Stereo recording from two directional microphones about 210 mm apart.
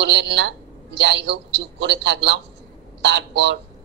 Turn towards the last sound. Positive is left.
turn(degrees=-55)  # may be behind; listen again after turning